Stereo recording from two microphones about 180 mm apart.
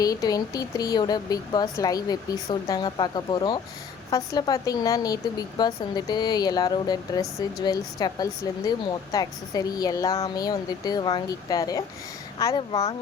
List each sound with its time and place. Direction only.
0.0 s a woman's voice: 20° left (ahead or behind)